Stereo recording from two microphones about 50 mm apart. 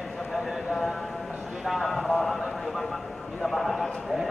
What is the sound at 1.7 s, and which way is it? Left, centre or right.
Clip-clop, centre.